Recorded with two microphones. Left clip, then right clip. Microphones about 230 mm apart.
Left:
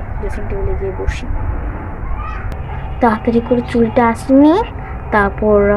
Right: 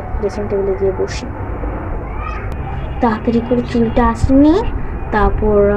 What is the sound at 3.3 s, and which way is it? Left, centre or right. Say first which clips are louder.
A woman's voice: left 2 dB; left.